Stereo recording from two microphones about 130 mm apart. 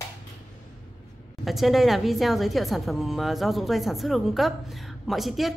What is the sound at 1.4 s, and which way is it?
A woman's voice, centre (ahead or behind).